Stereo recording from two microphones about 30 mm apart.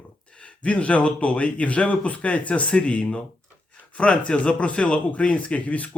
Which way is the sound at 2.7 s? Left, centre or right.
Left.